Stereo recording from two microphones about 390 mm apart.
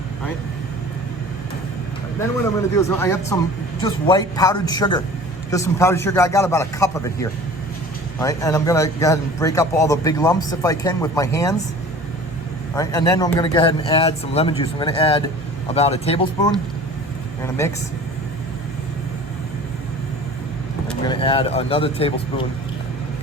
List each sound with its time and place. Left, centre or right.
2.7 s speech: centre
12.7 s speech: centre
20.8 s speech: centre